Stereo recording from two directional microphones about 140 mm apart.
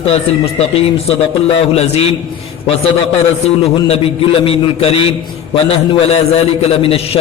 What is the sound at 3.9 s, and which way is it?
A man's voice, 40° left (ahead or behind).